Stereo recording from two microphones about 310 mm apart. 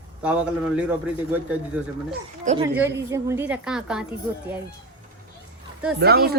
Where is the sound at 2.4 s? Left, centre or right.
Right.